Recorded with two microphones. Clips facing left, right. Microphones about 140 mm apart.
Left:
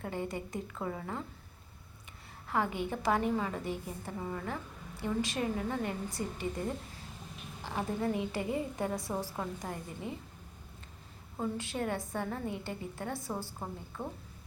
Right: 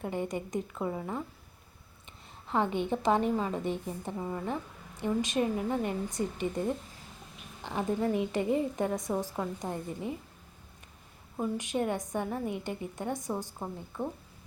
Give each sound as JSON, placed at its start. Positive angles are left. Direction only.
{"t": 0.0, "sound": "a woman's voice", "side_deg": -20}
{"t": 2.5, "sound": "a woman's voice", "side_deg": -25}
{"t": 7.6, "sound": "a woman's voice", "side_deg": -20}
{"t": 11.3, "sound": "a woman's voice", "side_deg": -15}